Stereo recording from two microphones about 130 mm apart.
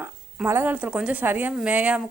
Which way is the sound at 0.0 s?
15° right (ahead or behind).